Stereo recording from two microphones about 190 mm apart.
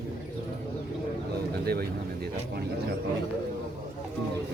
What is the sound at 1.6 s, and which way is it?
Speech, 55° right (ahead or behind).